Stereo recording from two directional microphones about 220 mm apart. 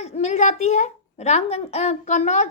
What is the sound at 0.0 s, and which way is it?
A woman's voice, 30° left (ahead or behind).